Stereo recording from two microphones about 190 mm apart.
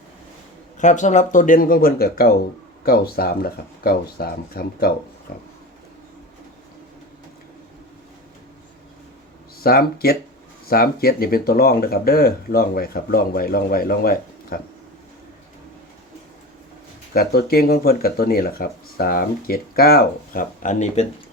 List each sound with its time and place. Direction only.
0.8 s speech: 40° left (ahead or behind)
9.6 s speech: 55° left (ahead or behind)
17.2 s speech: 55° left (ahead or behind)